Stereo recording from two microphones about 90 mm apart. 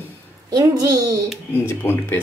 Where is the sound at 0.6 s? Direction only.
45° right (ahead or behind).